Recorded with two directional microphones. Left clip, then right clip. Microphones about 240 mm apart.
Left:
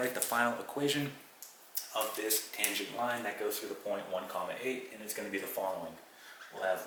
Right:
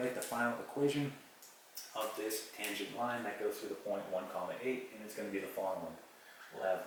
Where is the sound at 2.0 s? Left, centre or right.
Centre.